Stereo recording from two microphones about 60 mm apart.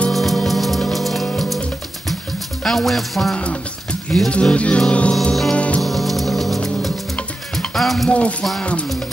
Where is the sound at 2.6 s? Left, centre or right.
Centre.